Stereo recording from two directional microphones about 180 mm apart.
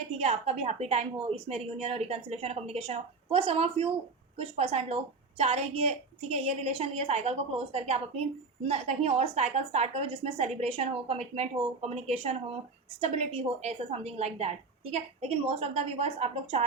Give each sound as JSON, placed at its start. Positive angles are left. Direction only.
{"t": 0.2, "sound": "a woman's voice", "side_deg": -35}